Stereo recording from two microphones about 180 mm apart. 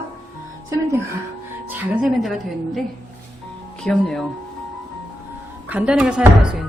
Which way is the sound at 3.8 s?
Centre (ahead or behind).